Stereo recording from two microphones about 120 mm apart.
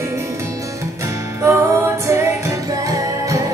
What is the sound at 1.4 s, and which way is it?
Music, 25° right (ahead or behind).